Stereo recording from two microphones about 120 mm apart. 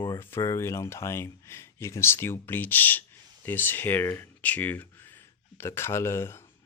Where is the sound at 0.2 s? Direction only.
20° left (ahead or behind).